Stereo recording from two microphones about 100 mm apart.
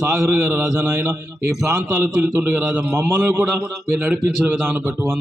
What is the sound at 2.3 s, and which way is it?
A man's voice, 20° right (ahead or behind).